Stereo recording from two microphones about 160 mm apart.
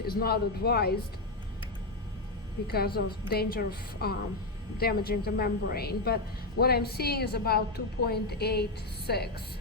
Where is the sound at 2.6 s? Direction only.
75° left (ahead or behind).